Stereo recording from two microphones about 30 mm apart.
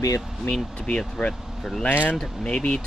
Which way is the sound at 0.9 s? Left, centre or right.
Left.